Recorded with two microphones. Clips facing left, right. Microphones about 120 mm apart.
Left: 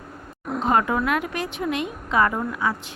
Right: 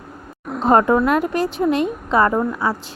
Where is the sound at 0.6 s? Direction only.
40° right (ahead or behind).